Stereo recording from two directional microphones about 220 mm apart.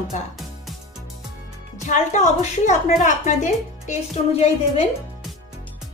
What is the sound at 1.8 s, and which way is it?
A woman's voice, 35° left (ahead or behind).